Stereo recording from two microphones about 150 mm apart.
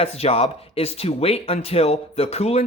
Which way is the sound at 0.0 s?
40° left (ahead or behind).